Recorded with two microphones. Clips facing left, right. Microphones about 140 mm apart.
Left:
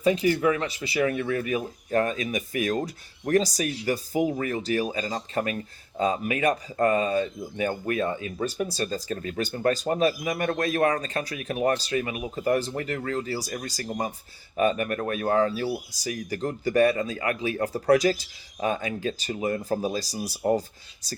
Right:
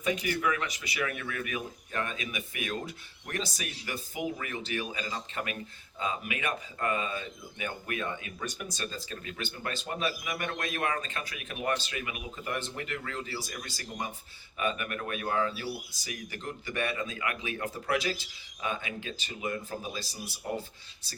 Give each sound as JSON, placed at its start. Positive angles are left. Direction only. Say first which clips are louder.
{"t": 0.0, "sound": "speech", "louder": "left 8 dB", "side_deg": 35}